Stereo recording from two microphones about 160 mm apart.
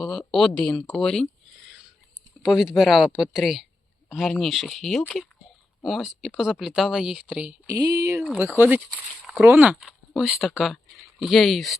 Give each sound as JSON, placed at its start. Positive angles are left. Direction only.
{"t": 0.0, "sound": "speech", "side_deg": 0}
{"t": 2.4, "sound": "speech", "side_deg": -5}
{"t": 7.7, "sound": "speech", "side_deg": -20}
{"t": 8.2, "sound": "speech", "side_deg": -5}